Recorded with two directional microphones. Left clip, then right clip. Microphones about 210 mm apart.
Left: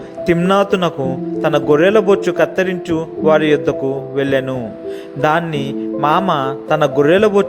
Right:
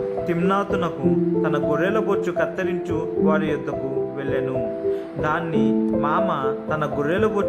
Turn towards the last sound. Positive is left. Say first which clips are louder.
# left 9 dB
turn(degrees=30)  # may be behind; listen again after turning